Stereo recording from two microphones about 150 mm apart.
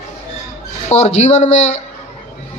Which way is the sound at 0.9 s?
45° left (ahead or behind).